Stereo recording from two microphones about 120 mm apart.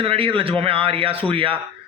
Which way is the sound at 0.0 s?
50° right (ahead or behind).